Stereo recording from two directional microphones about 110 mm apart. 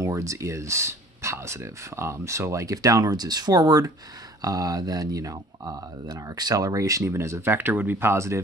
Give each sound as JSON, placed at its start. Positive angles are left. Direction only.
{"t": 0.0, "sound": "speech", "side_deg": -30}